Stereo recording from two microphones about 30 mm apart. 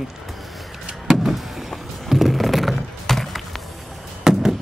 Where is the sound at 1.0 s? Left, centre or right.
Centre.